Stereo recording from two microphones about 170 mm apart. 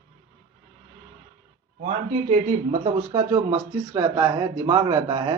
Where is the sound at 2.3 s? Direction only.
45° right (ahead or behind).